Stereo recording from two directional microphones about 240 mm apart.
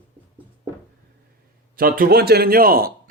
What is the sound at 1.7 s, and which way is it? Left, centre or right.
Speech, right.